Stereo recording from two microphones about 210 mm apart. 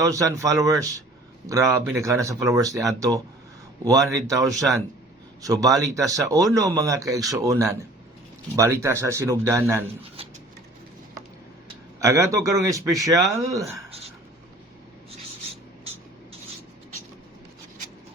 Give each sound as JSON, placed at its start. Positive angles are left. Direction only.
{"t": 0.0, "sound": "speech", "side_deg": -15}
{"t": 4.5, "sound": "speech", "side_deg": 0}
{"t": 5.4, "sound": "speech", "side_deg": -15}
{"t": 11.9, "sound": "speech", "side_deg": -15}